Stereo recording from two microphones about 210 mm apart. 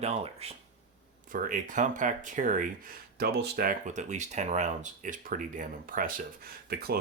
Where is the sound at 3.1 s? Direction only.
50° right (ahead or behind).